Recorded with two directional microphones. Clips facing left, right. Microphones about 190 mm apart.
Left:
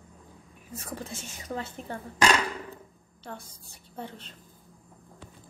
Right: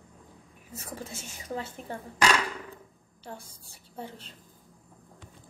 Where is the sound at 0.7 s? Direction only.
10° right (ahead or behind).